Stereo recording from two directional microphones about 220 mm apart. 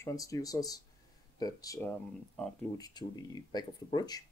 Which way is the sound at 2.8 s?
15° left (ahead or behind).